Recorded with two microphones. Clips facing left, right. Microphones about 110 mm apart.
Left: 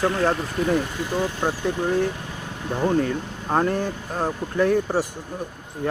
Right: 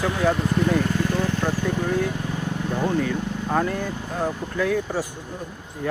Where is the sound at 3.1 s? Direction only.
35° left (ahead or behind).